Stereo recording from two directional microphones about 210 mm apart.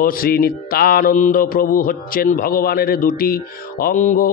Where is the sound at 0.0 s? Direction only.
45° left (ahead or behind).